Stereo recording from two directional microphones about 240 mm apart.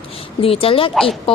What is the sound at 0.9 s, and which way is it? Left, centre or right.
Speech, centre.